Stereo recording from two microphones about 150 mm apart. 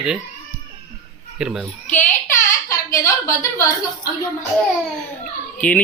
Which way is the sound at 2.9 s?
20° left (ahead or behind).